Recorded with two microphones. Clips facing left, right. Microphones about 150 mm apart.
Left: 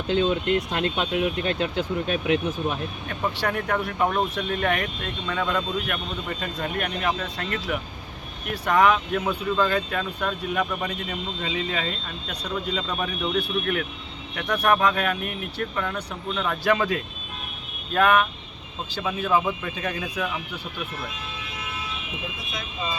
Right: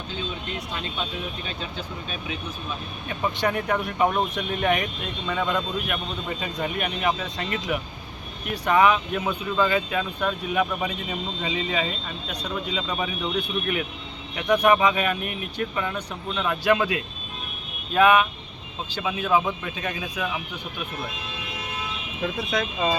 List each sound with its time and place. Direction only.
0.1 s speech: 75° left (ahead or behind)
3.1 s speech: 5° right (ahead or behind)
19.6 s speech: centre (ahead or behind)
22.5 s speech: 80° right